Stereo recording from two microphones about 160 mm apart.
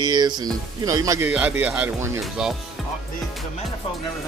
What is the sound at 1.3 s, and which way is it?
Speech, 10° right (ahead or behind).